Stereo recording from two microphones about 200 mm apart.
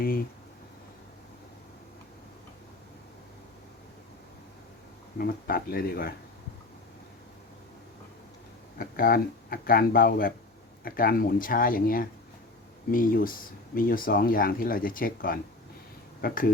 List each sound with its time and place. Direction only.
5.1 s speech: 45° left (ahead or behind)
8.8 s speech: 50° left (ahead or behind)